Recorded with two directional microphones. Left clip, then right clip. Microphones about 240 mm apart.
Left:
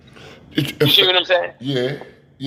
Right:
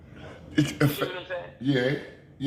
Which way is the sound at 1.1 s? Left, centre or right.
Left.